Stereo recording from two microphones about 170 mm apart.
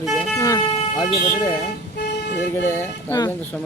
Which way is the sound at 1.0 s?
25° left (ahead or behind).